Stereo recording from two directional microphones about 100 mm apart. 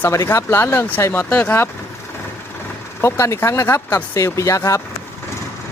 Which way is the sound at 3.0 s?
30° left (ahead or behind).